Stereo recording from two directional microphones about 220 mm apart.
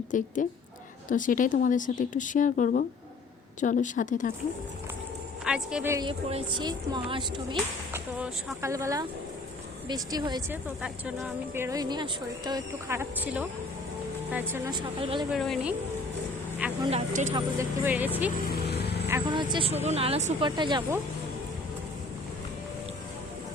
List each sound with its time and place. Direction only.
0.1 s speech: 35° left (ahead or behind)
5.5 s speech: 5° right (ahead or behind)
6.1 s speech: 20° right (ahead or behind)
7.9 s speech: 10° right (ahead or behind)
10.8 s speech: 5° right (ahead or behind); by 15.3 s 25° right (ahead or behind)
15.3 s a woman's voice: centre (ahead or behind)
16.9 s speech: 35° right (ahead or behind)
17.3 s speech: 10° right (ahead or behind)
18.5 s vehicle: 50° left (ahead or behind)
19.0 s speech: 15° right (ahead or behind)